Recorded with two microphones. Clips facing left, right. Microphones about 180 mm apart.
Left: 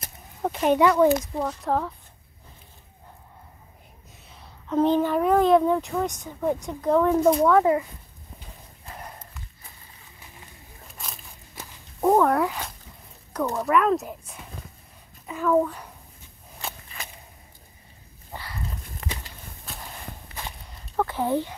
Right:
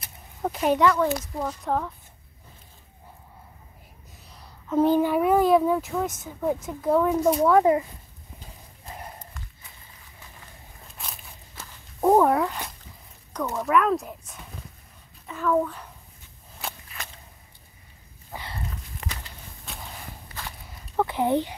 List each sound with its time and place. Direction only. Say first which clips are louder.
0.4 s speech: left 1 dB; centre (ahead or behind)
0.7 s speech: left 6 dB; 15° left (ahead or behind)
1.4 s speech: left 2 dB; centre (ahead or behind)
4.3 s speech: even; centre (ahead or behind)
12.0 s speech: right 1 dB; 10° right (ahead or behind)
12.4 s speech: left 1 dB; 5° left (ahead or behind)
15.2 s a child's voice: left 2 dB; 10° left (ahead or behind)
16.6 s walk: even; centre (ahead or behind)
18.3 s dog: right 1 dB; 5° right (ahead or behind)
19.6 s walk: even; centre (ahead or behind)
20.6 s a sound: right 1 dB; 10° right (ahead or behind)